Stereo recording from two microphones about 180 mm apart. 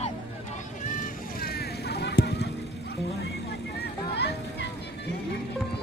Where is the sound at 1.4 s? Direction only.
60° left (ahead or behind).